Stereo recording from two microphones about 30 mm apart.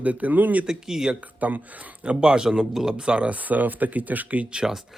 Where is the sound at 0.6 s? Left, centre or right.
Centre.